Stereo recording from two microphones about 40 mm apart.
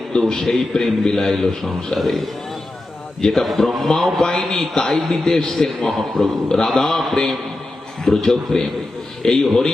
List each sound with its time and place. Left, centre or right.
0.1 s a man's voice: centre
3.3 s a man's voice: centre